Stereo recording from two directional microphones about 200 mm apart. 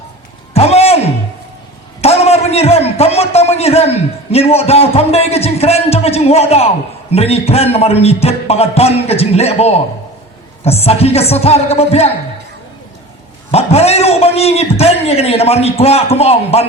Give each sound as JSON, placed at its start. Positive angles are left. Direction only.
{"t": 0.5, "sound": "a sound", "side_deg": 30}
{"t": 2.0, "sound": "a man's voice", "side_deg": 30}
{"t": 13.5, "sound": "a man's voice", "side_deg": 30}